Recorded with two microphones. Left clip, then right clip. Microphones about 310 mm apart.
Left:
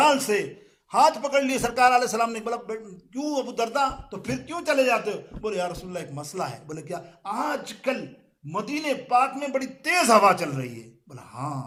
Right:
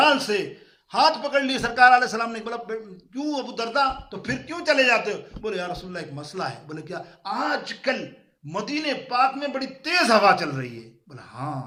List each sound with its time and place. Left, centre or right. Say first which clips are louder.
0.0 s a man's voice: right 1 dB; centre